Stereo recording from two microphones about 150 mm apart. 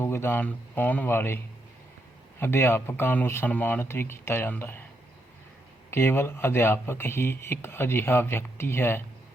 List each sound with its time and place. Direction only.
0.0 s speech: 15° left (ahead or behind)
2.4 s speech: 15° left (ahead or behind)
5.9 s speech: 15° left (ahead or behind)